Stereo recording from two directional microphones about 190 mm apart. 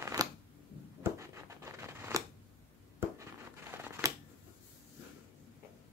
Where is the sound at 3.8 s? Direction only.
15° right (ahead or behind).